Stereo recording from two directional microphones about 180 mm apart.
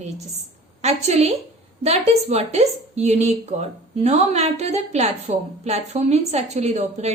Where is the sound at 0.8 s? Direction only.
35° right (ahead or behind).